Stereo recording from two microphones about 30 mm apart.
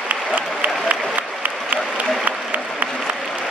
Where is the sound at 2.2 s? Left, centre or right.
Right.